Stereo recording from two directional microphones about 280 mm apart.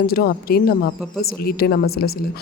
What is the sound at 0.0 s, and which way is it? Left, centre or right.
Speech, left.